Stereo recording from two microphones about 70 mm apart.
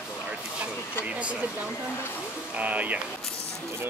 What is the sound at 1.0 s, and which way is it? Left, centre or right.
Speech, centre.